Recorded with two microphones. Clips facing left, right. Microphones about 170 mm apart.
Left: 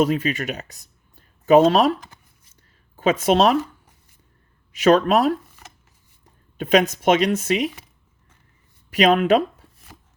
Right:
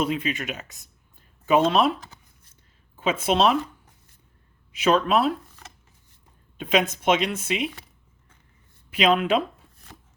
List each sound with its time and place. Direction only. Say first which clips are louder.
0.1 s speech: left 4 dB; 40° left (ahead or behind)
3.0 s speech: left 4 dB; 45° left (ahead or behind)
4.9 s speech: left 5 dB; 45° left (ahead or behind)
6.6 s speech: left 5 dB; 45° left (ahead or behind)
9.0 s speech: left 5 dB; 45° left (ahead or behind)